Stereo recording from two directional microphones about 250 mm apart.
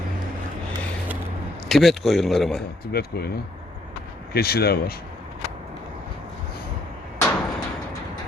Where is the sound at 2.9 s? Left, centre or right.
Left.